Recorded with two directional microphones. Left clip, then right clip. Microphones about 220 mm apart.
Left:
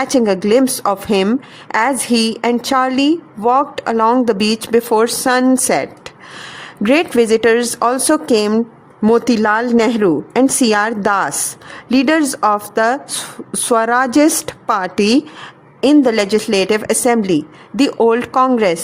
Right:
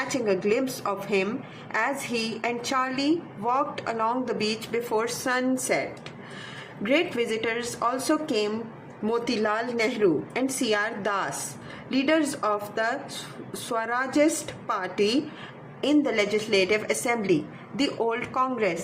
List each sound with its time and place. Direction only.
0.3 s a woman's voice: 55° left (ahead or behind)
6.8 s a woman's voice: 55° left (ahead or behind)